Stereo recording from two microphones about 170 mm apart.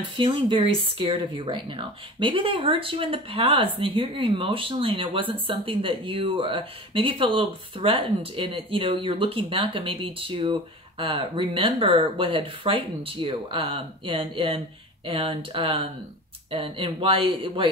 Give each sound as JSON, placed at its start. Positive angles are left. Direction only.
{"t": 0.2, "sound": "speech", "side_deg": -30}